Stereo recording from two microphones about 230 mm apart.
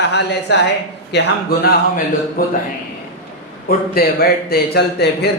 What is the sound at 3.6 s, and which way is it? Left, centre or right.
A man's voice, left.